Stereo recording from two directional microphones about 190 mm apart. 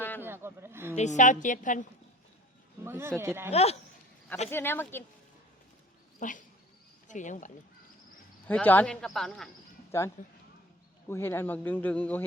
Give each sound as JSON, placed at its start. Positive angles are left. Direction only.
{"t": 0.2, "sound": "a sound", "side_deg": -10}
{"t": 0.9, "sound": "a woman's voice", "side_deg": 40}
{"t": 2.8, "sound": "speech", "side_deg": -10}
{"t": 3.5, "sound": "a woman's voice", "side_deg": 35}
{"t": 4.5, "sound": "speech", "side_deg": 10}
{"t": 6.1, "sound": "a woman's voice", "side_deg": 45}
{"t": 8.4, "sound": "speech", "side_deg": 10}
{"t": 9.9, "sound": "speech", "side_deg": 15}
{"t": 11.1, "sound": "speech", "side_deg": 10}